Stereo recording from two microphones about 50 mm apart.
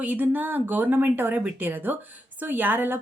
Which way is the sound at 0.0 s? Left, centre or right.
Right.